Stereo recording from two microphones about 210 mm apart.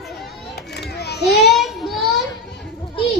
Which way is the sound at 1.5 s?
Centre (ahead or behind).